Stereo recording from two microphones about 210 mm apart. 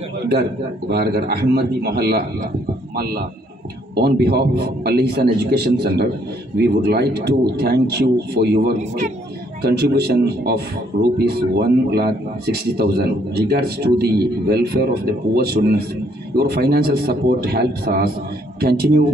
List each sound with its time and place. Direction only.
0.3 s a man's voice: 50° right (ahead or behind)
3.9 s a man's voice: 50° right (ahead or behind)